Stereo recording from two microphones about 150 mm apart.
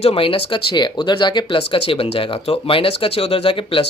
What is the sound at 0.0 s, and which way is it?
Speech, 40° left (ahead or behind).